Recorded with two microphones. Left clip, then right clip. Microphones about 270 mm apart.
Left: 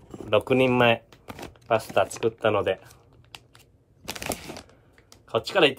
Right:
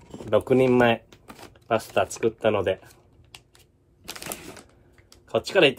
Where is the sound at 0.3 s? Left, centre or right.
Centre.